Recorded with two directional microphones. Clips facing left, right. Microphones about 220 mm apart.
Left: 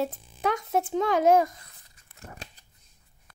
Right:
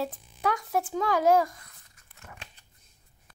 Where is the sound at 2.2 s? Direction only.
35° left (ahead or behind).